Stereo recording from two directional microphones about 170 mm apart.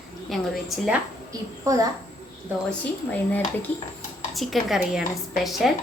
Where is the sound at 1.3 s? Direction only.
20° right (ahead or behind).